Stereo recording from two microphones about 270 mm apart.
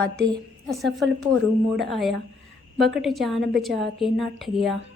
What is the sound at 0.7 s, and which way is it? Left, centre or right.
A woman's voice, centre.